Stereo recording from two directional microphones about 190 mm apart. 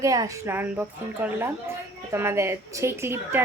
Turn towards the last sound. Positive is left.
turn(degrees=-15)  # may be behind; listen again after turning